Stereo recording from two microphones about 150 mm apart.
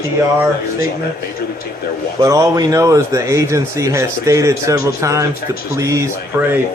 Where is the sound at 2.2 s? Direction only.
25° right (ahead or behind).